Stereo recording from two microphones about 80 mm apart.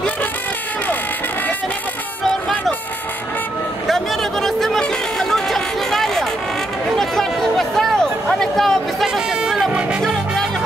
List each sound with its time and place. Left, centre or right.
3.8 s music: centre
7.0 s a sound: centre
10.0 s music: centre